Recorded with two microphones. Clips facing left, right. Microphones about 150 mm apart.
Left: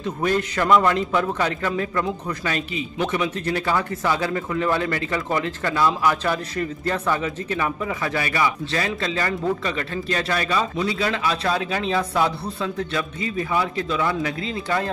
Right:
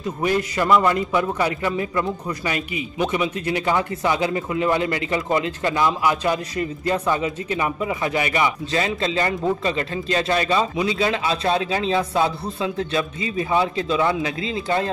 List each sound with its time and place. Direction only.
0.0 s a man's voice: 10° right (ahead or behind)